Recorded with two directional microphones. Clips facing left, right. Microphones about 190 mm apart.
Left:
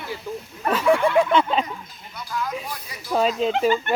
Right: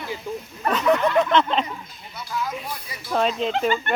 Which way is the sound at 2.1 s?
5° right (ahead or behind).